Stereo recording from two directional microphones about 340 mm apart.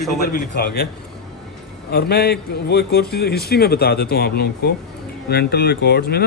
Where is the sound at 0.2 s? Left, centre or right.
Left.